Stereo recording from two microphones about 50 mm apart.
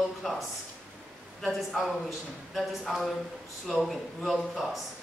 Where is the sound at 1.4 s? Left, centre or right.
Centre.